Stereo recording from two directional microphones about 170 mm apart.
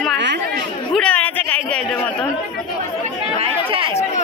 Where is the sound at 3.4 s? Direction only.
30° right (ahead or behind).